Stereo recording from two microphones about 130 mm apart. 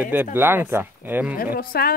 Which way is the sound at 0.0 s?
15° right (ahead or behind).